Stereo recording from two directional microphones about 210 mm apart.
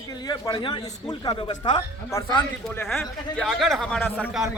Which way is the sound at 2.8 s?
Centre (ahead or behind).